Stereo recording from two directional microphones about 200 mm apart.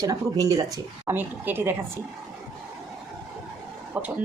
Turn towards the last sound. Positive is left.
turn(degrees=-10)  # may be behind; listen again after turning